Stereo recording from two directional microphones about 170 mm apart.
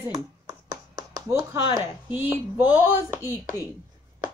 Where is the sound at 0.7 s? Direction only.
20° right (ahead or behind).